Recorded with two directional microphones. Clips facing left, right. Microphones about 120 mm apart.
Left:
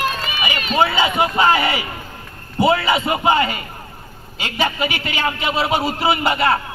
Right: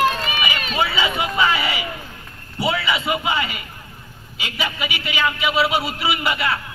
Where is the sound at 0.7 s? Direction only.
40° left (ahead or behind).